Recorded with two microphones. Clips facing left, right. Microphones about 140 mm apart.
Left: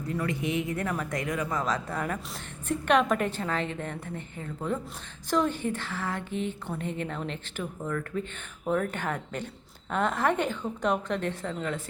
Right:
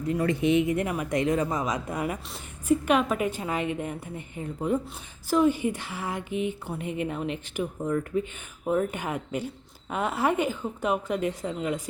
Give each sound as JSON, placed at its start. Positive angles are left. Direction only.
{"t": 0.1, "sound": "speech", "side_deg": -25}